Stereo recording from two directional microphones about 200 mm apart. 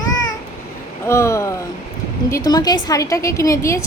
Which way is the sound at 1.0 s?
15° left (ahead or behind).